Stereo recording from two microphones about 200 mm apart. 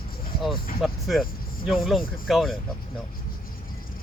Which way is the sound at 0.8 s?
Centre (ahead or behind).